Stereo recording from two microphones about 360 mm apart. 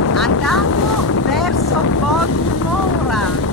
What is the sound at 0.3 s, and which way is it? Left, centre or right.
Boat, left.